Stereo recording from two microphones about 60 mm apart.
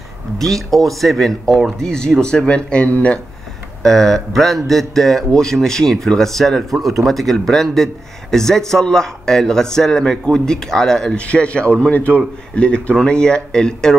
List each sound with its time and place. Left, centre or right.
0.5 s speech: centre; by 3.2 s left
3.8 s speech: centre
11.1 s speech: left